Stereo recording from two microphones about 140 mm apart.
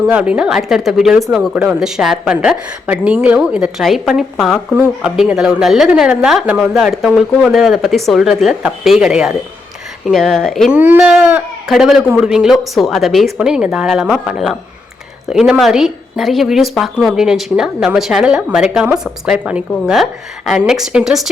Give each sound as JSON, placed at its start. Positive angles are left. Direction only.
{"t": 0.1, "sound": "a woman's voice", "side_deg": -10}